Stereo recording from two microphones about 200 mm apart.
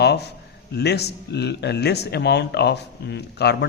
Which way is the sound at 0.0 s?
55° left (ahead or behind).